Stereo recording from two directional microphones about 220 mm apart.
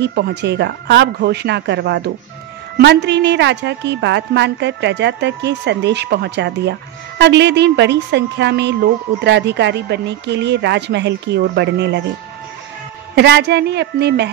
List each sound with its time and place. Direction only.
0.0 s a woman's voice: 50° right (ahead or behind)
13.1 s a woman's voice: 50° right (ahead or behind)